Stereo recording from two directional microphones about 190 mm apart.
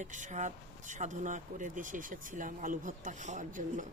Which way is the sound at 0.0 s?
40° right (ahead or behind).